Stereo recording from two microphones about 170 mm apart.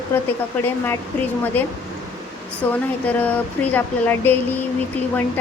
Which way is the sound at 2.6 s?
10° left (ahead or behind).